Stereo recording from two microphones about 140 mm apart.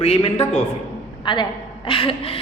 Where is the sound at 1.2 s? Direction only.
35° left (ahead or behind).